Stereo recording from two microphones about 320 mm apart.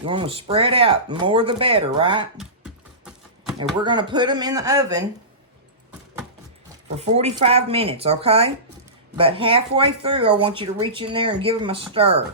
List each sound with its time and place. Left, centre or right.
0.0 s speech: centre
2.4 s a sound: centre
3.8 s speech: centre
6.9 s speech: centre